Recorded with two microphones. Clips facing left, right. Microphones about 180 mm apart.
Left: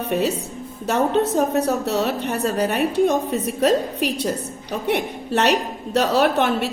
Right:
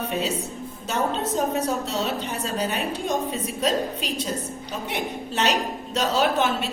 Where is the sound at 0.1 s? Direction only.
60° left (ahead or behind).